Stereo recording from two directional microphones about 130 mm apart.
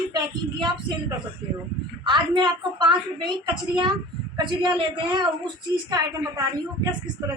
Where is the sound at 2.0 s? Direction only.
35° right (ahead or behind).